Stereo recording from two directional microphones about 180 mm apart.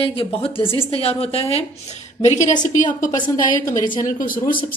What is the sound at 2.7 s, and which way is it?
Speech, 45° left (ahead or behind).